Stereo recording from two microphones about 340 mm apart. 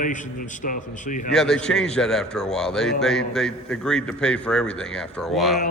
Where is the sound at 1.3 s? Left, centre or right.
Centre.